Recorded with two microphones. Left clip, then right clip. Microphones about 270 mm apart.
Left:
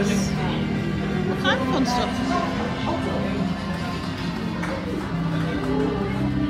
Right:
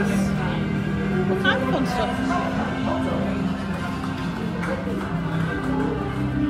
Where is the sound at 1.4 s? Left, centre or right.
Centre.